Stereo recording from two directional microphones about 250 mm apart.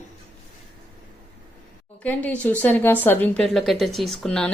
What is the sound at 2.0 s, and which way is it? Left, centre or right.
Speech, centre.